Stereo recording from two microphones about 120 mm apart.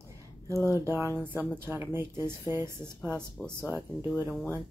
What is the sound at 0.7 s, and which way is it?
Speech, 20° right (ahead or behind).